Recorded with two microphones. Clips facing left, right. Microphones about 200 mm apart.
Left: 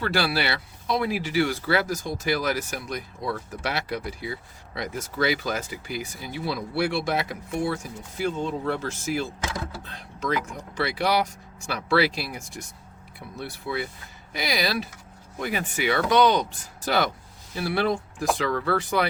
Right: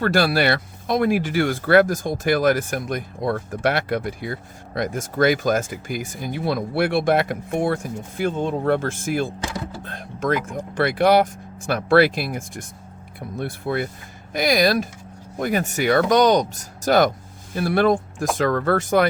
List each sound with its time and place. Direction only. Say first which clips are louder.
0.0 s speech: right 7 dB; 45° right (ahead or behind)